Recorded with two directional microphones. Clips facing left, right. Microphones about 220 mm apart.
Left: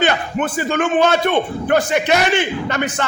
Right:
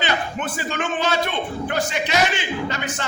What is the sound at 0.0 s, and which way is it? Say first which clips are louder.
A man's voice: left 6 dB; 55° left (ahead or behind).